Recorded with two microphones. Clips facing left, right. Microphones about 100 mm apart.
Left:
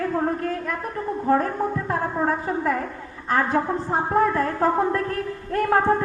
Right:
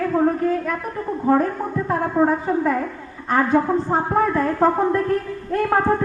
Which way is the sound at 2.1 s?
10° right (ahead or behind).